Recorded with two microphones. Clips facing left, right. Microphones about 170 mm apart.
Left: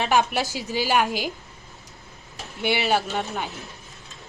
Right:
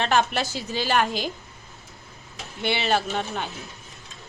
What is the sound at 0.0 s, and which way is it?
Speech, 10° left (ahead or behind).